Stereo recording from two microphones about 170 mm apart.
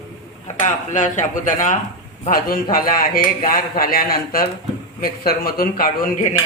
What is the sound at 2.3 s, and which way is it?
Speech, 60° left (ahead or behind).